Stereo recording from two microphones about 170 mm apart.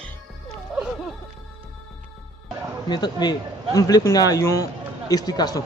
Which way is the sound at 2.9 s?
25° left (ahead or behind).